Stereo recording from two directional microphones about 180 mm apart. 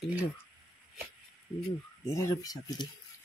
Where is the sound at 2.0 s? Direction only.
20° left (ahead or behind).